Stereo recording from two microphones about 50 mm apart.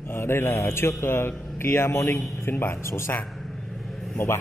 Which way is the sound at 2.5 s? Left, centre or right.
Left.